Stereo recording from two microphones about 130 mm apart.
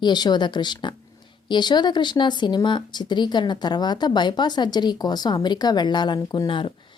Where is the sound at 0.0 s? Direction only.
35° left (ahead or behind).